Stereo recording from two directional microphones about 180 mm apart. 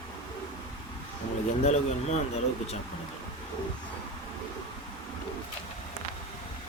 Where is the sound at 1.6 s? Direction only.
40° left (ahead or behind).